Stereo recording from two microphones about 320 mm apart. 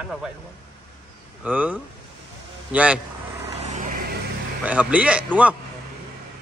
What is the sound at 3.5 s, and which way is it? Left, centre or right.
Vehicle, right.